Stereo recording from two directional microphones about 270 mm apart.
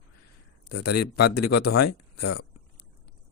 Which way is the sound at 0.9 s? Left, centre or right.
Left.